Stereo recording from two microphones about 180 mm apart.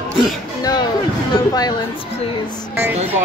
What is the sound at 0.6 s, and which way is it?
Speech, 20° left (ahead or behind).